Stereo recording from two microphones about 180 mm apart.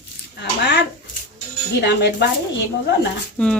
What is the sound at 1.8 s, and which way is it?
Speech, 70° left (ahead or behind).